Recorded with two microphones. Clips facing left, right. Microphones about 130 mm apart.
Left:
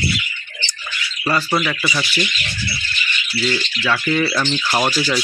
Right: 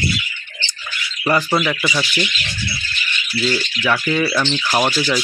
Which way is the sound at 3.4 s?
10° right (ahead or behind).